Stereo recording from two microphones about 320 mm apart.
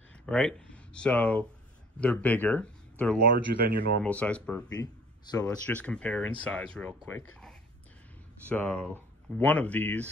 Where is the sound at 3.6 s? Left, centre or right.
Right.